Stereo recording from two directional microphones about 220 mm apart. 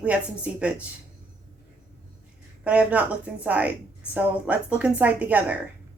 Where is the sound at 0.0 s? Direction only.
5° right (ahead or behind).